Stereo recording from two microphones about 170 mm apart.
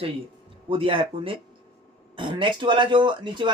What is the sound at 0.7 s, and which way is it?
Speech, 30° right (ahead or behind).